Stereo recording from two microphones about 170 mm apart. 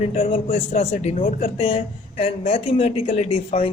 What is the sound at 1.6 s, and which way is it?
Speech, 35° left (ahead or behind).